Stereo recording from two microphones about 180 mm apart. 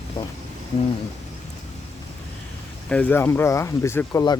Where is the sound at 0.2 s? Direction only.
25° left (ahead or behind).